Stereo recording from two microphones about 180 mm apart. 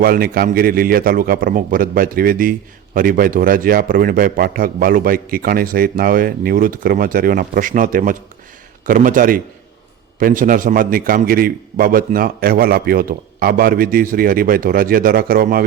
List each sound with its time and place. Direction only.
0.0 s a man's voice: 55° right (ahead or behind)